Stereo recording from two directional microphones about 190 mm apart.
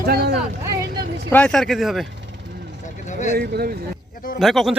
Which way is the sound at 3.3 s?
55° right (ahead or behind).